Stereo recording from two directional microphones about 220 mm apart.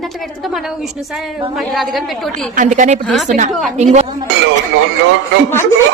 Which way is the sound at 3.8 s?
30° right (ahead or behind).